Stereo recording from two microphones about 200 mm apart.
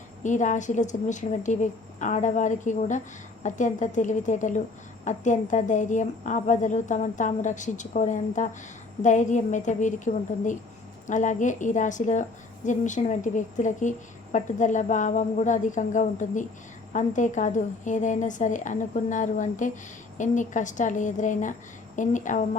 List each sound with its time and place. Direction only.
0.2 s a woman's voice: 40° left (ahead or behind)